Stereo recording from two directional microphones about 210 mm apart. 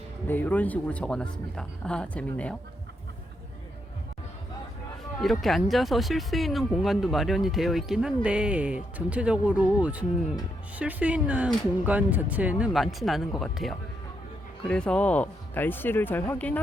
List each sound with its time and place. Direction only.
0.3 s speech: 10° left (ahead or behind)
5.2 s speech: centre (ahead or behind)